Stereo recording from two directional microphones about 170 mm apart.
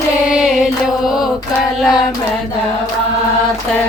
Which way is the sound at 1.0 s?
5° right (ahead or behind).